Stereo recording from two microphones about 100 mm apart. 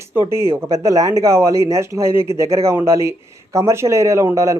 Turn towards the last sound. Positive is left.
turn(degrees=-30)  # may be behind; listen again after turning